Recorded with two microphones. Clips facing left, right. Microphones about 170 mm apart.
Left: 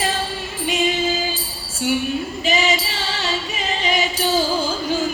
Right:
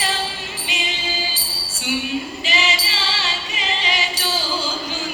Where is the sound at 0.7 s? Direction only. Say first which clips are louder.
Left 10 dB; 50° left (ahead or behind).